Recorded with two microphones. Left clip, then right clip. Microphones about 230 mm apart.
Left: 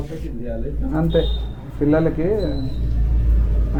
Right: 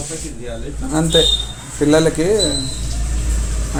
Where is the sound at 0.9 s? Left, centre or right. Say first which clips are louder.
Right 7 dB; right.